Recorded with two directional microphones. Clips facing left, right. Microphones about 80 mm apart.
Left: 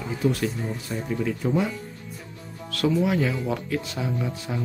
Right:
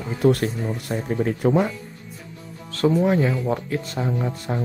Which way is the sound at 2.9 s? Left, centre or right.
Right.